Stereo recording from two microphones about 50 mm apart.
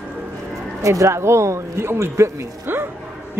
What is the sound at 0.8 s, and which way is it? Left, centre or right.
Speech, right.